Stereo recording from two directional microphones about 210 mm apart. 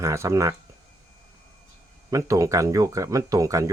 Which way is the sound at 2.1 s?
15° right (ahead or behind).